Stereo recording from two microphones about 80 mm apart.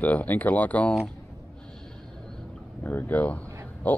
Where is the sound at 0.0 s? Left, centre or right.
Left.